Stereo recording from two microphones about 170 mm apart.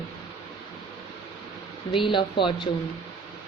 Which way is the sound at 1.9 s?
30° left (ahead or behind).